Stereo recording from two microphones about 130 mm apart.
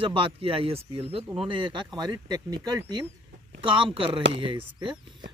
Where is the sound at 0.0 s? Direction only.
45° right (ahead or behind).